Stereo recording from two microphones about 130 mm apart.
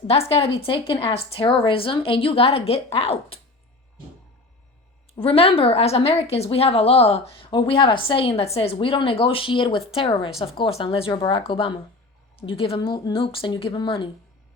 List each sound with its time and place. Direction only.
0.1 s a woman's voice: 50° left (ahead or behind)
5.1 s a woman's voice: 45° left (ahead or behind)